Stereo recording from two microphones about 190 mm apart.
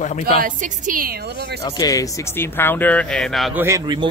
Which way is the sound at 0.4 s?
45° right (ahead or behind).